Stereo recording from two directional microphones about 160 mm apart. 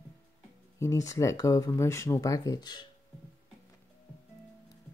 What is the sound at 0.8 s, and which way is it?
Speech, 20° left (ahead or behind).